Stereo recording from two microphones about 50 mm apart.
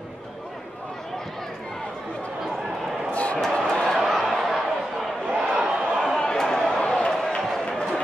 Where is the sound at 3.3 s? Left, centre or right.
Centre.